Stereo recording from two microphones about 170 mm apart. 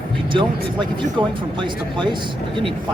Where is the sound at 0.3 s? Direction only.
30° right (ahead or behind).